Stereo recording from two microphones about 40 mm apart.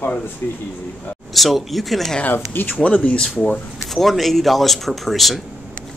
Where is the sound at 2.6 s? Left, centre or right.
Left.